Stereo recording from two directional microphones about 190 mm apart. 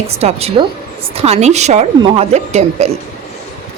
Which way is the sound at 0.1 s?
35° right (ahead or behind).